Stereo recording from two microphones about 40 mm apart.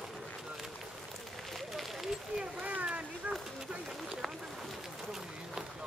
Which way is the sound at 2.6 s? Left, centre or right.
Right.